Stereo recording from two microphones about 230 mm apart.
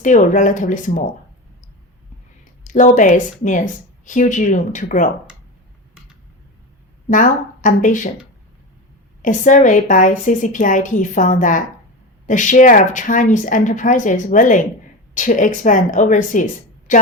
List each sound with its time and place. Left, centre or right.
0.0 s a woman's voice: left
2.6 s a woman's voice: left
7.1 s a woman's voice: left
9.2 s a woman's voice: left